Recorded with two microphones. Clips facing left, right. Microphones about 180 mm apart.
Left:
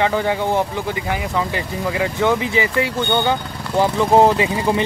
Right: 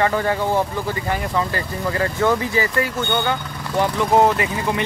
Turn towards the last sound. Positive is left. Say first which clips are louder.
# left 4 dB
turn(degrees=25)  # may be behind; listen again after turning